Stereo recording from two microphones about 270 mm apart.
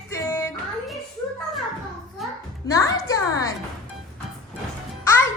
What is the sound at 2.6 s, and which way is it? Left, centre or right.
Speech, centre.